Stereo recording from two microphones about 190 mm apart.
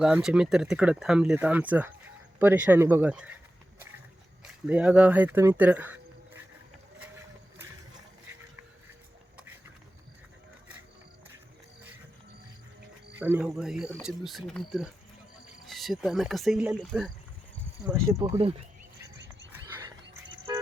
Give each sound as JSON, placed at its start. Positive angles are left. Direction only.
{"t": 0.0, "sound": "speech", "side_deg": -5}
{"t": 4.4, "sound": "speech", "side_deg": -5}
{"t": 13.1, "sound": "speech", "side_deg": -10}
{"t": 17.8, "sound": "speech", "side_deg": -15}